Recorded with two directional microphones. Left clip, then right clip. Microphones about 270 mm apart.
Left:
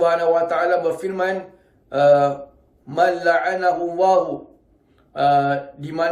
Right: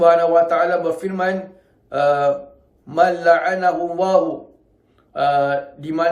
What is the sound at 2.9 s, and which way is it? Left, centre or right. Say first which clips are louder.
A man's voice: right 3 dB; centre.